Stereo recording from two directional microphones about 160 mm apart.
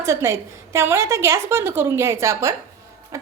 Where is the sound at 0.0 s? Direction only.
20° right (ahead or behind).